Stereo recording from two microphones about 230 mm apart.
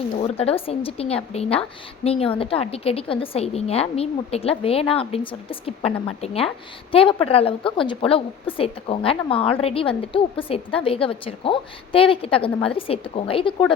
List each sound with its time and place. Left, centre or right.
0.2 s a woman's voice: left